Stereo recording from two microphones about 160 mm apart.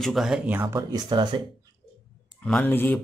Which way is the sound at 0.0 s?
Centre (ahead or behind).